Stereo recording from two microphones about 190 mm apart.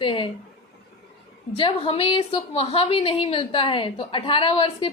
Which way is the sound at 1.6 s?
30° left (ahead or behind).